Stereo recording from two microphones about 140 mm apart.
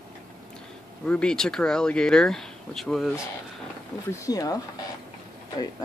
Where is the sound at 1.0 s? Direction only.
5° left (ahead or behind).